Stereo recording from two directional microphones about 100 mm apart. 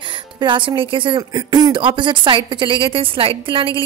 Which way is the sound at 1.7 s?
55° right (ahead or behind).